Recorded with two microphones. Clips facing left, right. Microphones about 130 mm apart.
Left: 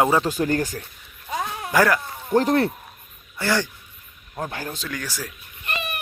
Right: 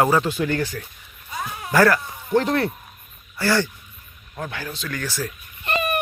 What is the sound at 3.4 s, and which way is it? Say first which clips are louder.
Speech: right 2 dB; 15° left (ahead or behind).